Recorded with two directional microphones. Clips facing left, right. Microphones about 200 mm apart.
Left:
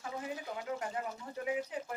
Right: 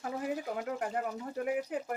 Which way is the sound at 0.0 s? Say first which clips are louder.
Right 5 dB; 55° right (ahead or behind).